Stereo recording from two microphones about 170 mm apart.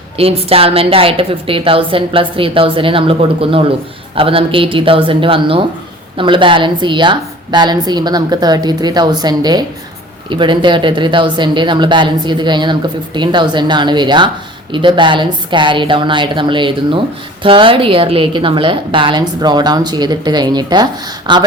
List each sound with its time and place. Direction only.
0.2 s a woman's voice: 35° right (ahead or behind)